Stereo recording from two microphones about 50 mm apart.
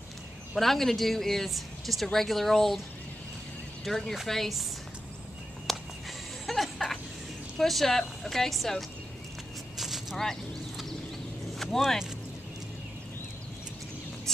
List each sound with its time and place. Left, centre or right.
0.6 s speech: centre
3.8 s speech: centre
5.7 s a sound: centre
7.5 s speech: centre
9.8 s a sound: centre
11.5 s vehicle: centre